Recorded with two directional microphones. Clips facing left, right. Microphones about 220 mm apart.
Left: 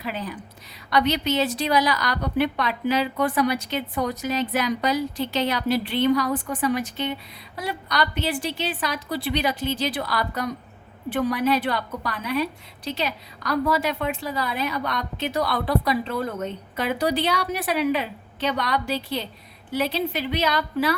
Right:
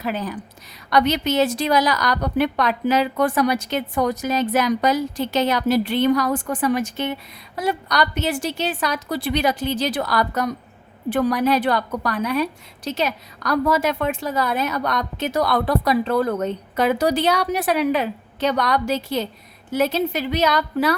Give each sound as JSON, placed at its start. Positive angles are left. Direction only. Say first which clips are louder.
{"t": 0.0, "sound": "a woman's voice", "louder": "right 5 dB", "side_deg": -45}
{"t": 3.2, "sound": "a woman's voice", "louder": "right 3 dB", "side_deg": -90}
{"t": 3.7, "sound": "a woman's voice", "louder": "right 4 dB", "side_deg": -45}